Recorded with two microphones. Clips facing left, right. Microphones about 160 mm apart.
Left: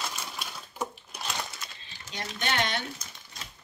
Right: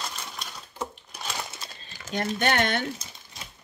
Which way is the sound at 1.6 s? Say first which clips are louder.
Right 2 dB; 30° right (ahead or behind).